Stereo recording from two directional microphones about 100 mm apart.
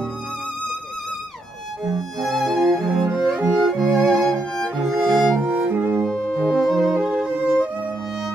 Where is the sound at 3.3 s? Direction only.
15° right (ahead or behind).